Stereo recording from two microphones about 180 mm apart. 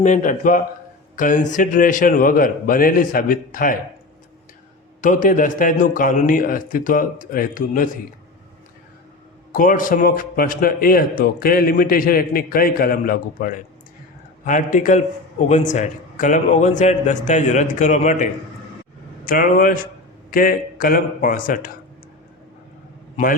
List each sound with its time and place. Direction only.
0.0 s a man's voice: 45° left (ahead or behind)
4.9 s a man's voice: 45° left (ahead or behind)
9.5 s a man's voice: 50° left (ahead or behind)